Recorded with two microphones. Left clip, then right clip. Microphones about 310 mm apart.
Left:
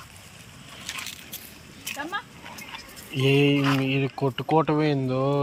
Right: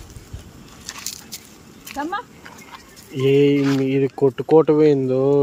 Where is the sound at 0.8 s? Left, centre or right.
Right.